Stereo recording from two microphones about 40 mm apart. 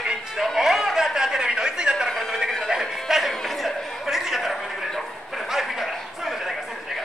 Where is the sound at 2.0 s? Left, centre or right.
Centre.